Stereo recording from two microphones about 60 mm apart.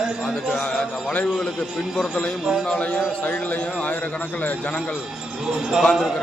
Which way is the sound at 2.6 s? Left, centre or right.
Left.